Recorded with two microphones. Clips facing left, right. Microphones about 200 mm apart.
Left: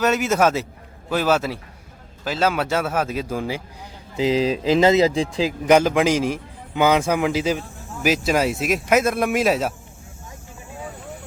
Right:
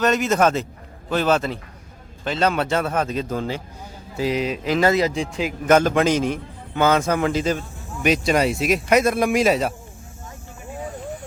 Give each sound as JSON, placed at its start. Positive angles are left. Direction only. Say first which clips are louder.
{"t": 0.0, "sound": "a man's voice", "louder": "even", "side_deg": 5}
{"t": 4.2, "sound": "speech", "louder": "left 3 dB", "side_deg": 30}
{"t": 5.6, "sound": "a man's voice", "louder": "even", "side_deg": 10}